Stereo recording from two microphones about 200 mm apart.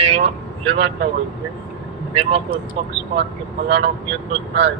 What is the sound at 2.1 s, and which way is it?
Speech, 30° right (ahead or behind).